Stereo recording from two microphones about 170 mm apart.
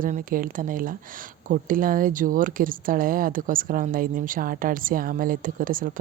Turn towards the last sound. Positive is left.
turn(degrees=-55)  # may be behind; listen again after turning